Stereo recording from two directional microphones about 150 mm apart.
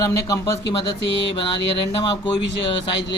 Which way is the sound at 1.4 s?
35° left (ahead or behind).